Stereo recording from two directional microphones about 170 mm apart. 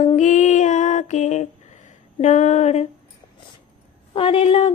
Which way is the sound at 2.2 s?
45° left (ahead or behind).